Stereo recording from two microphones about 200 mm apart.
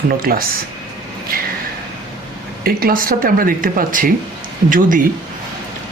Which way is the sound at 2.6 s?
45° right (ahead or behind).